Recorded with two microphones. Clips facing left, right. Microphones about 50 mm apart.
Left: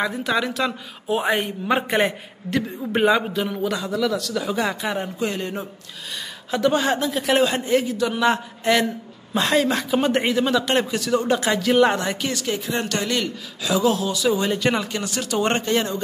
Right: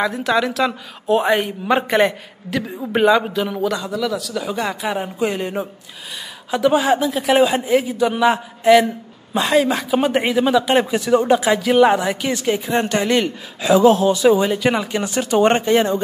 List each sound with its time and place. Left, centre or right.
0.0 s a man's voice: centre
11.3 s a man's voice: centre
12.3 s a woman's voice: right
14.4 s a man's voice: centre
15.0 s a woman's voice: right